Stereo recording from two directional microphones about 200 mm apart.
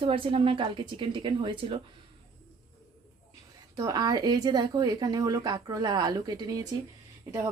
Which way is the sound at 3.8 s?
20° right (ahead or behind).